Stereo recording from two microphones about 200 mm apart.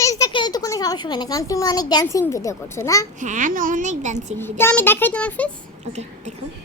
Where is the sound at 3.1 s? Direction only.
40° right (ahead or behind).